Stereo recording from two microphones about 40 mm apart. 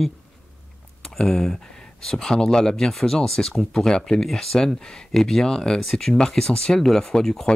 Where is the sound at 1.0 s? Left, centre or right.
Centre.